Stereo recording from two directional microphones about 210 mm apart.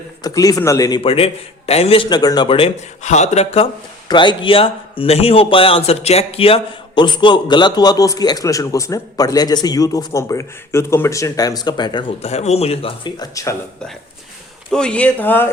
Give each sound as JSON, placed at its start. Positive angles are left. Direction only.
{"t": 0.2, "sound": "a man's voice", "side_deg": 15}
{"t": 14.7, "sound": "speech", "side_deg": 5}